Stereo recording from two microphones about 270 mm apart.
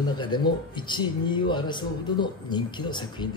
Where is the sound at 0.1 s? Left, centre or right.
Centre.